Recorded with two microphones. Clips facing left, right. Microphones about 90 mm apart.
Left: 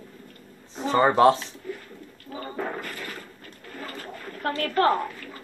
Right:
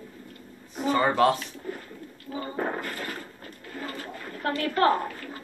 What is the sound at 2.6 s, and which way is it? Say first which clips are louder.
Speech: right 1 dB; 40° right (ahead or behind).